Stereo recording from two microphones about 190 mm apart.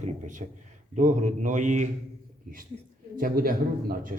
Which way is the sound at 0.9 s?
40° right (ahead or behind).